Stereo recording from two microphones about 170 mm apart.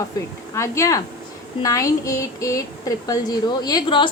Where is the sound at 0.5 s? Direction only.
15° left (ahead or behind).